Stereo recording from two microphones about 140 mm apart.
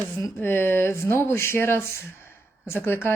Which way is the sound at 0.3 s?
15° left (ahead or behind).